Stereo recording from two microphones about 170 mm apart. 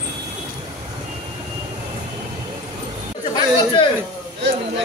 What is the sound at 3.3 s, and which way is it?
Chatter, 30° left (ahead or behind).